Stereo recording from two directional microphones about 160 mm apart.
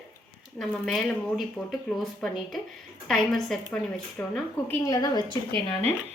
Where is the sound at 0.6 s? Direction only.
Centre (ahead or behind).